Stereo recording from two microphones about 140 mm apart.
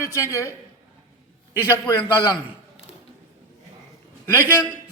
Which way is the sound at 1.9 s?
20° left (ahead or behind).